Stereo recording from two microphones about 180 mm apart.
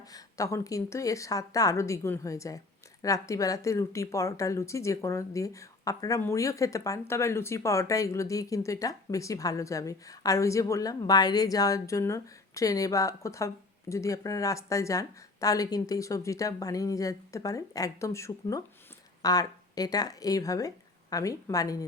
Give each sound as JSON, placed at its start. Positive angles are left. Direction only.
{"t": 0.1, "sound": "a woman's voice", "side_deg": 20}